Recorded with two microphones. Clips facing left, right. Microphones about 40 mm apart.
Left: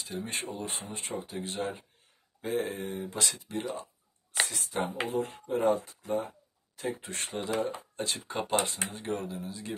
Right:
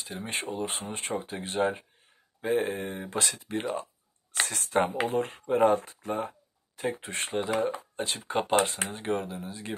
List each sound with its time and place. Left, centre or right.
0.1 s speech: right
3.1 s speech: right
4.5 s speech: right
7.3 s speech: right
7.9 s a sound: right
8.3 s speech: right